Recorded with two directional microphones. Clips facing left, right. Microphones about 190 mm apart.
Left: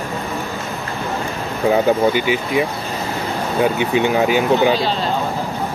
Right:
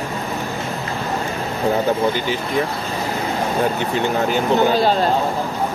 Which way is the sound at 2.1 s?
10° left (ahead or behind).